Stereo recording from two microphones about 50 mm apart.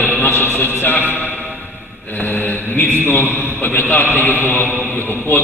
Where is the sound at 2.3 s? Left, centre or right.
Left.